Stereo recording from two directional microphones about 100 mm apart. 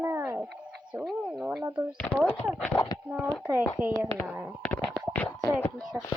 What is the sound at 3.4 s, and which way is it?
Speech, 10° right (ahead or behind).